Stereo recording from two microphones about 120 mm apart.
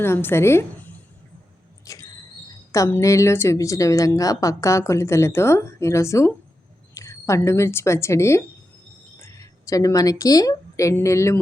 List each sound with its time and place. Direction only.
0.0 s a woman's voice: 20° left (ahead or behind)
1.8 s a sound: 30° left (ahead or behind)
2.5 s a woman's voice: 25° left (ahead or behind)